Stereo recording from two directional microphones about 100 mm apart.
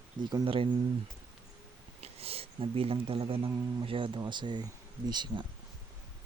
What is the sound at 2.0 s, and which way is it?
Speech, 85° right.